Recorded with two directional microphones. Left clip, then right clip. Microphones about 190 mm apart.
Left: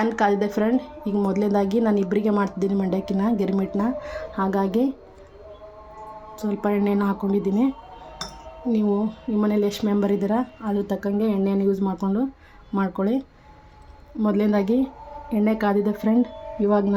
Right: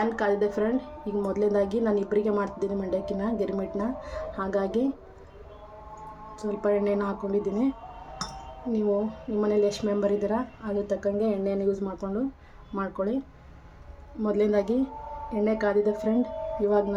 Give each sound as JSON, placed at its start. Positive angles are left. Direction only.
{"t": 0.0, "sound": "a woman's voice", "side_deg": 45}
{"t": 6.4, "sound": "a woman's voice", "side_deg": 50}
{"t": 9.4, "sound": "a woman's voice", "side_deg": 50}
{"t": 14.2, "sound": "a woman's voice", "side_deg": 40}